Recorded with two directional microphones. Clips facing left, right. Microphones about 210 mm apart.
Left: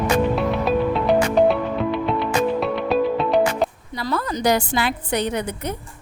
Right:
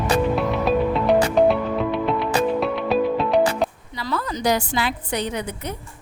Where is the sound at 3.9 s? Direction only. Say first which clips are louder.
Left 4 dB; 45° left (ahead or behind).